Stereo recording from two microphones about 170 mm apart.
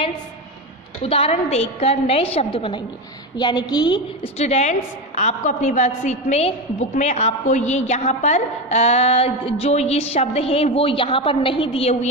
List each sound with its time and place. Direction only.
1.0 s a woman's voice: 35° left (ahead or behind)
4.4 s a woman's voice: 40° left (ahead or behind)